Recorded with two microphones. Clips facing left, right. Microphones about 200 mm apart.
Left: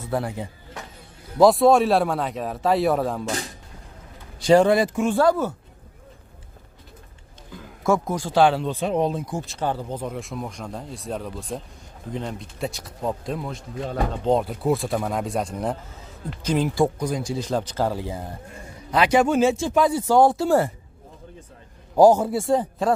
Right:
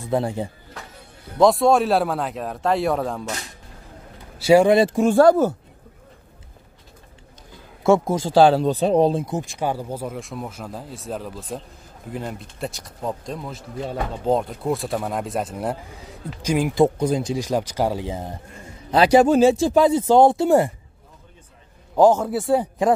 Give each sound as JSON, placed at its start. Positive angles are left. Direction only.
{"t": 0.1, "sound": "speech", "side_deg": -25}
{"t": 1.4, "sound": "speech", "side_deg": 0}
{"t": 4.4, "sound": "speech", "side_deg": -10}
{"t": 4.7, "sound": "speech", "side_deg": -30}
{"t": 7.8, "sound": "speech", "side_deg": -25}
{"t": 9.4, "sound": "speech", "side_deg": -15}
{"t": 16.8, "sound": "speech", "side_deg": -25}
{"t": 17.4, "sound": "speech", "side_deg": -10}
{"t": 18.9, "sound": "speech", "side_deg": -35}
{"t": 19.9, "sound": "speech", "side_deg": -20}
{"t": 21.9, "sound": "a man's voice", "side_deg": 10}
{"t": 22.3, "sound": "speech", "side_deg": -5}